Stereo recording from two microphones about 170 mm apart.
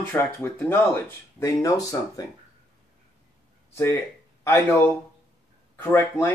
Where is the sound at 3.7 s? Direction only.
15° left (ahead or behind).